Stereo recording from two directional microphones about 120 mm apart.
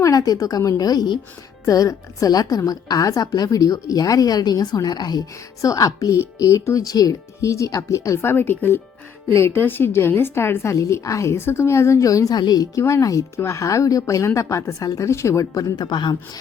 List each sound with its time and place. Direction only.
0.0 s a woman's voice: 30° left (ahead or behind)